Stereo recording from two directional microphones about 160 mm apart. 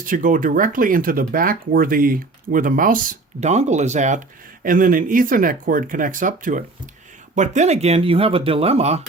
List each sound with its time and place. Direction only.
0.0 s speech: 55° right (ahead or behind)
4.6 s speech: 60° right (ahead or behind); by 9.0 s 40° right (ahead or behind)